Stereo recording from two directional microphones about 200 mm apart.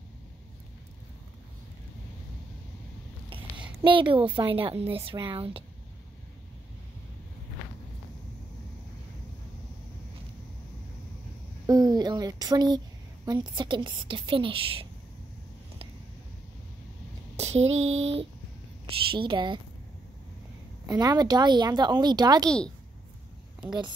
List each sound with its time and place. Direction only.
3.3 s a woman's voice: 25° right (ahead or behind)
11.6 s speech: 20° right (ahead or behind)
17.4 s a sound: 35° right (ahead or behind)
19.0 s speech: 25° right (ahead or behind)
20.8 s speech: 20° right (ahead or behind)